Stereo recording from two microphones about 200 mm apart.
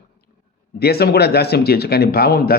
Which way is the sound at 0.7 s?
50° left (ahead or behind).